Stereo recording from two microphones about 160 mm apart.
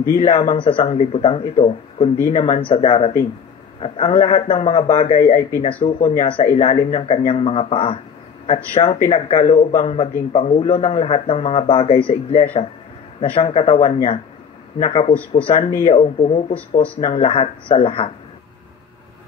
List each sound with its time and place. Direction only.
0.1 s a man's voice: 50° left (ahead or behind)
2.7 s a man's voice: 35° left (ahead or behind)
9.0 s a man's voice: 45° left (ahead or behind)